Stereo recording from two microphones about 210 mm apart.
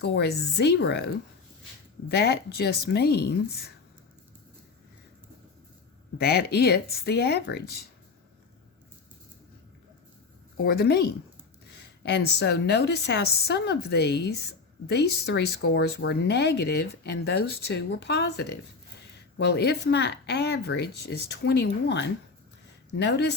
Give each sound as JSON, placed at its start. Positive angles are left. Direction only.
{"t": 0.0, "sound": "a woman's voice", "side_deg": 50}
{"t": 6.1, "sound": "a woman's voice", "side_deg": 50}
{"t": 10.6, "sound": "a woman's voice", "side_deg": 50}